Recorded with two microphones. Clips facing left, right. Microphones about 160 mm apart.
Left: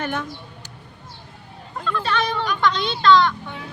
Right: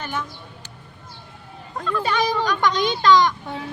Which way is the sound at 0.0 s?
60° left (ahead or behind).